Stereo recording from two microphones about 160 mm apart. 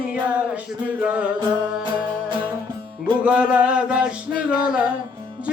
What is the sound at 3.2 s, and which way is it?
Music, 10° right (ahead or behind).